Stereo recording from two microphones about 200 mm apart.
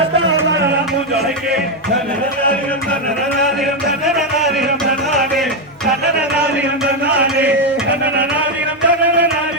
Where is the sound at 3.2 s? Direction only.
Centre (ahead or behind).